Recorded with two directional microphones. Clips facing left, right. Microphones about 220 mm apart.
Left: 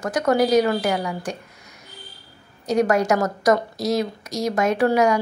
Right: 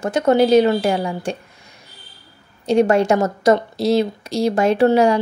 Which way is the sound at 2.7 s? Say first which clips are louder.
Right 4 dB; 30° right (ahead or behind).